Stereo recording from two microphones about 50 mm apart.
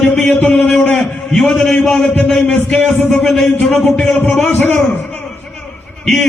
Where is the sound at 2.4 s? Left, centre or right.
Left.